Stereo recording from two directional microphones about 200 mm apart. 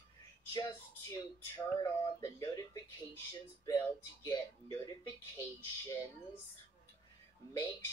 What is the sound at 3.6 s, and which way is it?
Speech, 15° left (ahead or behind).